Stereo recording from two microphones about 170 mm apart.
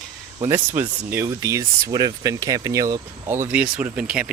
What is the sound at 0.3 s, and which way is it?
Speech, 20° right (ahead or behind).